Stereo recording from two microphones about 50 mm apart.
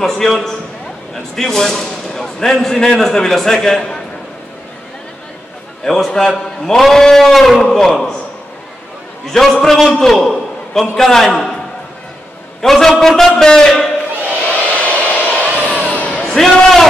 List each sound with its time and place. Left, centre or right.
0.0 s a man's voice: centre
5.9 s a man's voice: centre
9.2 s a man's voice: centre
12.6 s a man's voice: centre
14.9 s a sound: left
15.5 s crowd: left
15.9 s a sound: left
16.3 s a man's voice: centre